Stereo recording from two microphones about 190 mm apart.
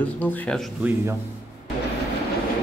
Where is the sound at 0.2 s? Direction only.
10° left (ahead or behind).